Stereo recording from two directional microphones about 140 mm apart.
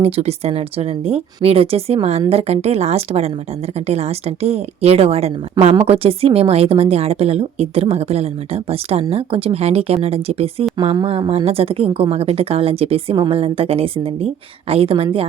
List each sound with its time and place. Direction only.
0.0 s a woman's voice: 50° right (ahead or behind)